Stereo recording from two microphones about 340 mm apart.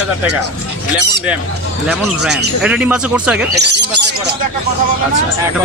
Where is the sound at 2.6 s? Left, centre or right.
Centre.